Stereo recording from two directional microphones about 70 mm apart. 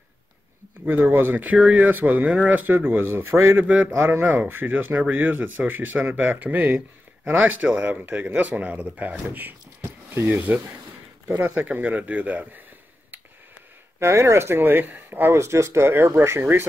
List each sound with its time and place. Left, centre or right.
0.8 s speech: right
1.6 s speech: centre
1.9 s speech: right
3.6 s speech: centre
3.9 s speech: right
13.9 s speech: right
15.3 s speech: right